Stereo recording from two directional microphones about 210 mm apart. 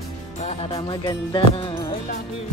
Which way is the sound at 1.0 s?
15° left (ahead or behind).